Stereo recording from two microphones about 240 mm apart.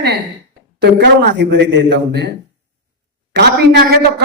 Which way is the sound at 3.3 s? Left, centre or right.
Right.